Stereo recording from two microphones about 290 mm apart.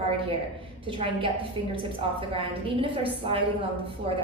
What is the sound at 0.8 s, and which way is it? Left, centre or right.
A woman's voice, centre.